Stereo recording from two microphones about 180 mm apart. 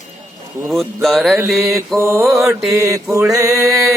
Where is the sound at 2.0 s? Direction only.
15° right (ahead or behind).